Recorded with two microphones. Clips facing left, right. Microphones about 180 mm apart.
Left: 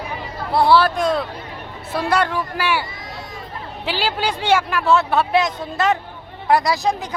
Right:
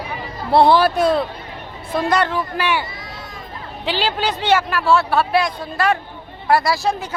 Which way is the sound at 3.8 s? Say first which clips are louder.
Right 1 dB; 10° left (ahead or behind).